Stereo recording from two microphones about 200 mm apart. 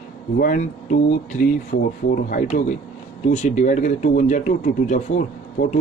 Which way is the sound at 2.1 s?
45° left (ahead or behind).